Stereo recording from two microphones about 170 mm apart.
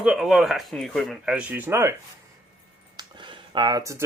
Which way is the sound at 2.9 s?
25° right (ahead or behind).